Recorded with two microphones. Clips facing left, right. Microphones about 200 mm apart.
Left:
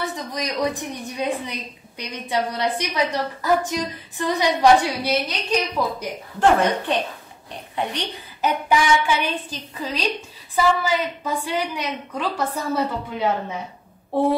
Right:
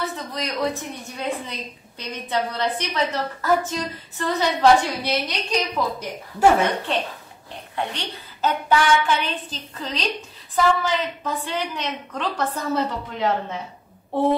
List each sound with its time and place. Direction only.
0.0 s a woman's voice: 15° left (ahead or behind)